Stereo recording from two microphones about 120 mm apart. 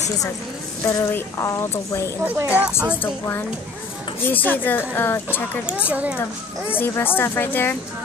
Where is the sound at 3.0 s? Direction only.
20° left (ahead or behind).